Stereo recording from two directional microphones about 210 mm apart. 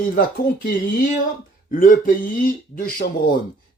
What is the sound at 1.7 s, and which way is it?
Speech, 40° left (ahead or behind).